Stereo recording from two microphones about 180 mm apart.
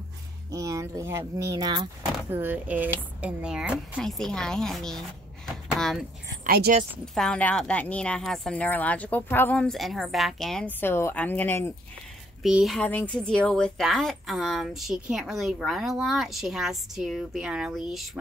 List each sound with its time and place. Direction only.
0.5 s speech: 20° right (ahead or behind)
2.3 s speech: 10° right (ahead or behind)
6.4 s speech: 55° right (ahead or behind)
7.2 s speech: 5° left (ahead or behind)
12.4 s speech: centre (ahead or behind)